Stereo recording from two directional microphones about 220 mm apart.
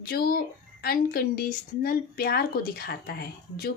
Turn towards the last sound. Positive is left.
turn(degrees=45)  # may be behind; listen again after turning